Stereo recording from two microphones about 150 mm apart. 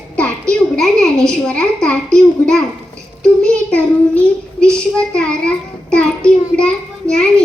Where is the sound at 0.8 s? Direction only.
5° left (ahead or behind).